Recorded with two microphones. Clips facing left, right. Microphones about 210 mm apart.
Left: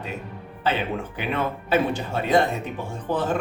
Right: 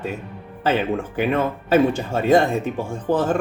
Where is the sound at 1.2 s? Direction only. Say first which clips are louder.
Right 7 dB; 45° right (ahead or behind).